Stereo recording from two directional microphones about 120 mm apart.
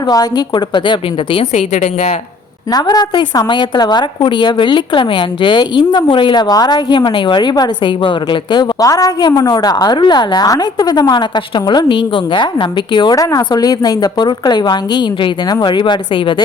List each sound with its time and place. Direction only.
0.0 s a woman's voice: 30° left (ahead or behind)
1.5 s a woman's voice: 75° left (ahead or behind)
2.7 s a woman's voice: 35° left (ahead or behind)